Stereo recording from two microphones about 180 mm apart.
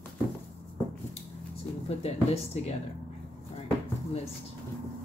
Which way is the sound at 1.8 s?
35° left (ahead or behind).